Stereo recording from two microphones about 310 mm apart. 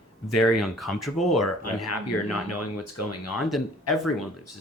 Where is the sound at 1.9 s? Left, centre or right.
Left.